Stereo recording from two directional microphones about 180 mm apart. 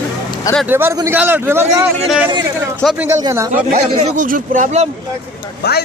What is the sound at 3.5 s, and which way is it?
Speech, 45° right (ahead or behind).